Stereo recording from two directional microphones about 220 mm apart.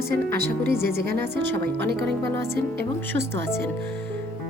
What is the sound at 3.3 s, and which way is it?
Speech, 10° left (ahead or behind).